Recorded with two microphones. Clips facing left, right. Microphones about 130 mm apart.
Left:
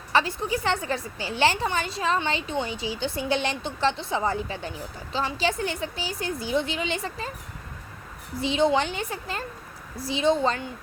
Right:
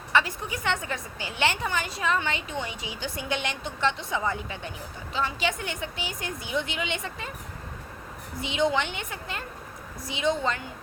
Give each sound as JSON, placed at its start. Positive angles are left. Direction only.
{"t": 0.1, "sound": "a woman's voice", "side_deg": 30}
{"t": 8.4, "sound": "a woman's voice", "side_deg": 30}